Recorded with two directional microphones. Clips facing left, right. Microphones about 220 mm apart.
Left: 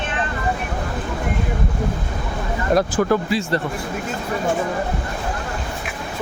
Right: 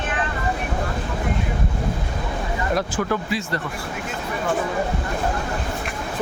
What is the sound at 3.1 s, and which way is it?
Speech, 30° left (ahead or behind).